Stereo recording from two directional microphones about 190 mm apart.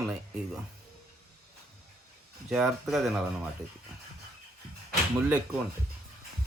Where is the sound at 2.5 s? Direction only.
Centre (ahead or behind).